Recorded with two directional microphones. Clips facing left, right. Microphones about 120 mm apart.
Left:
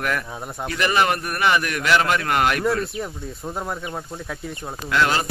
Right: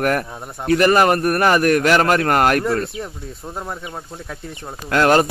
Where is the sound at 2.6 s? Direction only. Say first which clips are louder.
Right 1 dB; centre (ahead or behind).